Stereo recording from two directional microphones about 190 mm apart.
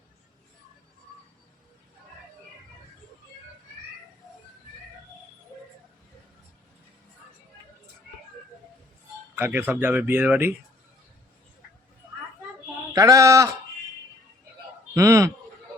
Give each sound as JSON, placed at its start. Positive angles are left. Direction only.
{"t": 9.3, "sound": "speech", "side_deg": -10}
{"t": 12.9, "sound": "speech", "side_deg": -15}
{"t": 14.9, "sound": "speech", "side_deg": -15}